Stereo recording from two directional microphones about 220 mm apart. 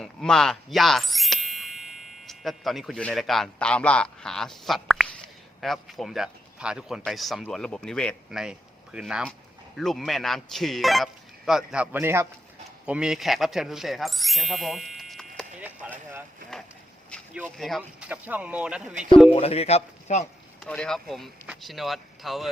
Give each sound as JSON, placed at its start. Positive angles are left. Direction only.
{"t": 0.0, "sound": "speech", "side_deg": 0}
{"t": 19.3, "sound": "speech", "side_deg": 25}
{"t": 20.7, "sound": "speech", "side_deg": 5}